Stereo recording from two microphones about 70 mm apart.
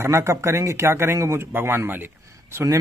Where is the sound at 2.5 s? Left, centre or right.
Right.